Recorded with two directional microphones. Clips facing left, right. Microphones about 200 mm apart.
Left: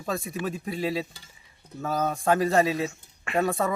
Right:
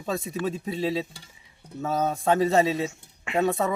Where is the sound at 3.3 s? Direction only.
20° right (ahead or behind).